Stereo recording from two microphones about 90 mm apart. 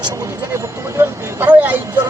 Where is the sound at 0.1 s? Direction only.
35° right (ahead or behind).